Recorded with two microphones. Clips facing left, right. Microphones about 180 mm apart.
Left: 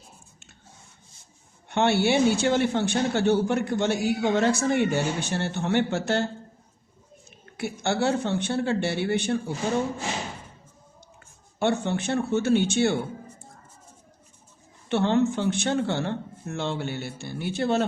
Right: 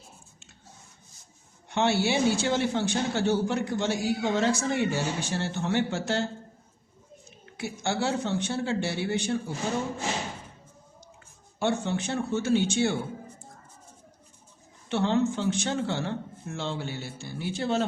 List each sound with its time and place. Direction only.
1.7 s a man's voice: 60° left (ahead or behind)
7.3 s a man's voice: 60° left (ahead or behind)
11.6 s a man's voice: 60° left (ahead or behind)
14.8 s a man's voice: 60° left (ahead or behind)